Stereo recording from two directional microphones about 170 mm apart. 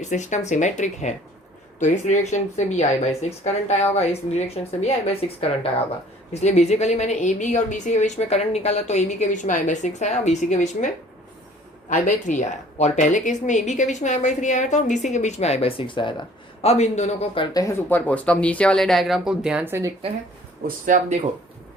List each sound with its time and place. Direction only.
0.0 s a woman's voice: 45° left (ahead or behind); by 19.9 s 15° right (ahead or behind)
20.7 s speech: 50° right (ahead or behind)